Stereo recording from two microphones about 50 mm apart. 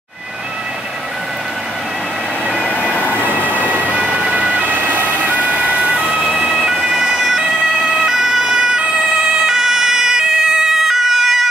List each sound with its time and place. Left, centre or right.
3.5 s emergency vehicle: right
4.1 s ambulance: right
6.0 s ambulance: centre
7.7 s emergency vehicle: centre